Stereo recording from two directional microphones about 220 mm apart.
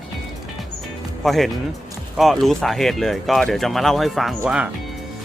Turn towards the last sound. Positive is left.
turn(degrees=-5)  # may be behind; listen again after turning